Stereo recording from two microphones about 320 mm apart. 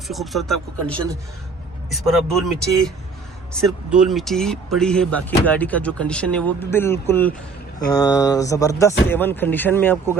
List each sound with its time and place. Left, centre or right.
0.1 s speech: centre